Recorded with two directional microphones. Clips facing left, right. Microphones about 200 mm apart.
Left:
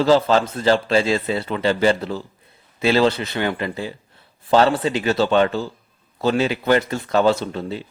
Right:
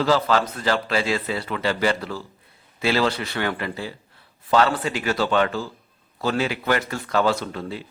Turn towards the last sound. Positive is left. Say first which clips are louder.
# left 3 dB
turn(degrees=25)  # may be behind; listen again after turning